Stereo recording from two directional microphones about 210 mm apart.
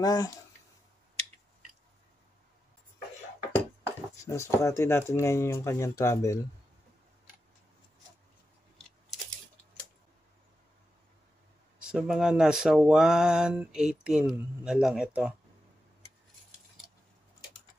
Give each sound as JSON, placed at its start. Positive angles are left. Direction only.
{"t": 0.0, "sound": "speech", "side_deg": 15}
{"t": 4.2, "sound": "speech", "side_deg": 15}
{"t": 11.8, "sound": "speech", "side_deg": -5}